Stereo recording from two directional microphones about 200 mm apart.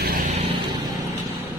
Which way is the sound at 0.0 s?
45° right (ahead or behind).